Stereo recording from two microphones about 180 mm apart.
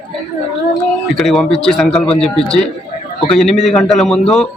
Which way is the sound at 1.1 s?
Centre (ahead or behind).